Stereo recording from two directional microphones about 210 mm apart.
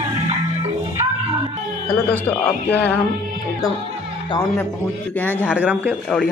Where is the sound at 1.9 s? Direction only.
10° left (ahead or behind).